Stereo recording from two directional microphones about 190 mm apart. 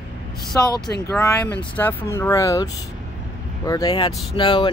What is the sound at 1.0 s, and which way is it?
Speech, 10° left (ahead or behind).